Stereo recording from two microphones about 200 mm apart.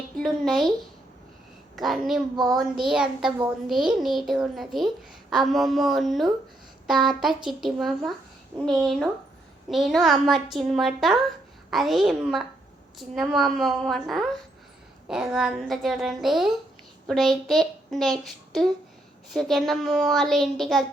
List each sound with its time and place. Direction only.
0.2 s a woman's voice: centre (ahead or behind)
1.7 s a woman's voice: centre (ahead or behind)
2.3 s child singing: 20° right (ahead or behind)
2.7 s a woman's voice: 5° right (ahead or behind)